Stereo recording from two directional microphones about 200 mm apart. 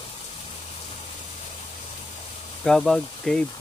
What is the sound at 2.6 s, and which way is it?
Speech, 5° left (ahead or behind).